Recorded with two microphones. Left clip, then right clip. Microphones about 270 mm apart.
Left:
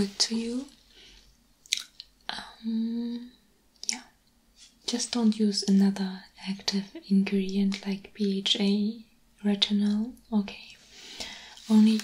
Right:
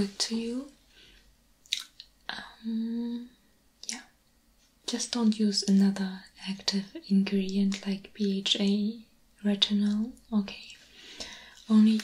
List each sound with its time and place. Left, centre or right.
0.0 s speech: centre
1.6 s chewing: centre
4.8 s speech: centre
9.4 s whispering: centre